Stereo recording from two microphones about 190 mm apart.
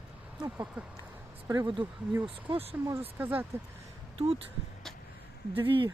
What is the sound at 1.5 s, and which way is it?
Speech, 20° right (ahead or behind).